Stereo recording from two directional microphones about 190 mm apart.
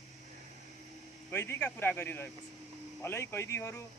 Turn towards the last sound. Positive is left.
turn(degrees=15)  # may be behind; listen again after turning